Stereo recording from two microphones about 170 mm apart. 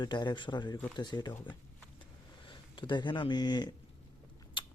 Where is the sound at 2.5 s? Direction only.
25° left (ahead or behind).